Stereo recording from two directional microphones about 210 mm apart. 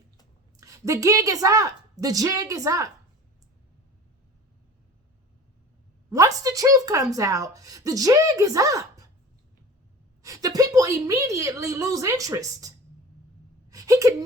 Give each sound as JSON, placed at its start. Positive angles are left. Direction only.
{"t": 0.5, "sound": "a woman's voice", "side_deg": -15}
{"t": 6.1, "sound": "a woman's voice", "side_deg": -15}
{"t": 10.2, "sound": "a woman's voice", "side_deg": -15}
{"t": 13.7, "sound": "a sound", "side_deg": -15}